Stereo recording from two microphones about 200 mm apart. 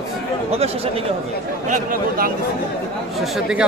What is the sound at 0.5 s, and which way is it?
Speech, 30° right (ahead or behind).